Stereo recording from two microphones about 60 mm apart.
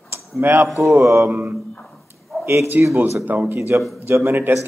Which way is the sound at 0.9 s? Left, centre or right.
Right.